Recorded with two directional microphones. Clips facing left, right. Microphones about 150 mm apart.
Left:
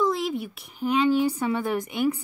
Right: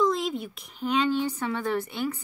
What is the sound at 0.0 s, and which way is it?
A woman's voice, 5° left (ahead or behind).